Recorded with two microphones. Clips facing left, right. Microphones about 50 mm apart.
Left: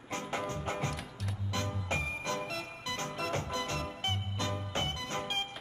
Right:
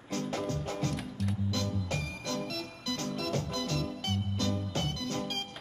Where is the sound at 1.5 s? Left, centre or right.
Left.